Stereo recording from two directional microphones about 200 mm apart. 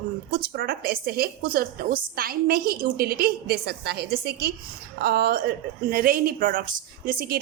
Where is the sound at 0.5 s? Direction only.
50° right (ahead or behind).